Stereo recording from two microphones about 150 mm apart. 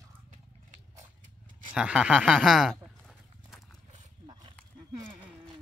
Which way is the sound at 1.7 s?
5° right (ahead or behind).